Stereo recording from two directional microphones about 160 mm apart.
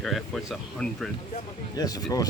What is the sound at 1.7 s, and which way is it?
Speech, 25° left (ahead or behind).